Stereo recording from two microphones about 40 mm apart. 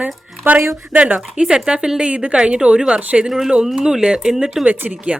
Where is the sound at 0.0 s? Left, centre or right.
Right.